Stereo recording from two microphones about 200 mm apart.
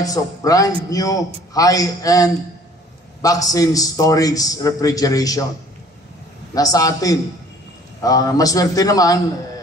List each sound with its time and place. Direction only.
0.0 s a man's voice: 15° left (ahead or behind)
6.5 s a man's voice: 20° left (ahead or behind)